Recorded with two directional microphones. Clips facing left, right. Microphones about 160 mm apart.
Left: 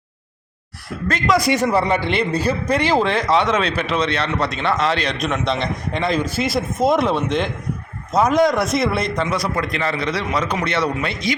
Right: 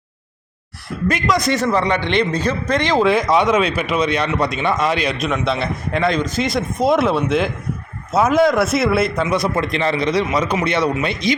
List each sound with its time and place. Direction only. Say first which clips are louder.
1.3 s a man's voice: left 2 dB; 10° left (ahead or behind)
3.0 s a man's voice: right 3 dB; 10° right (ahead or behind)
9.3 s a man's voice: right 3 dB; 25° right (ahead or behind)